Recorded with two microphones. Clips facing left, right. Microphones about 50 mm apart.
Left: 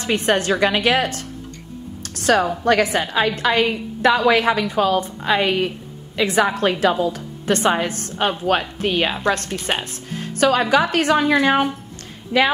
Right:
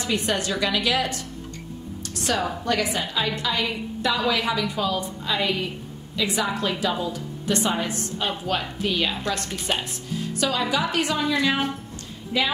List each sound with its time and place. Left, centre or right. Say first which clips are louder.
0.0 s a woman's voice: left 6 dB; left
2.0 s music: left 9 dB; left
2.6 s a woman's voice: left 7 dB; left
11.3 s a woman's voice: left 6 dB; left